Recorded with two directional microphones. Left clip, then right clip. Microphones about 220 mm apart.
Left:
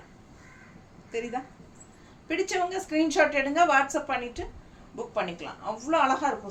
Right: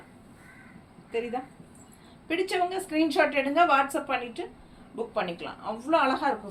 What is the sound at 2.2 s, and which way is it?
A woman's voice, 15° left (ahead or behind).